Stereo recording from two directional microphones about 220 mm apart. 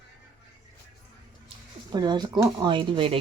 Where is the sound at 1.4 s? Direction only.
20° right (ahead or behind).